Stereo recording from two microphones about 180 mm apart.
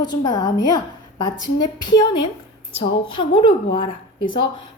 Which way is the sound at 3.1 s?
25° left (ahead or behind).